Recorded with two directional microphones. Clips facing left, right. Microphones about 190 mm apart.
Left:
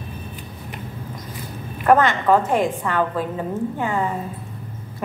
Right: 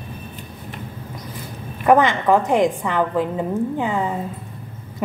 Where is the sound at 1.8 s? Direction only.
15° right (ahead or behind).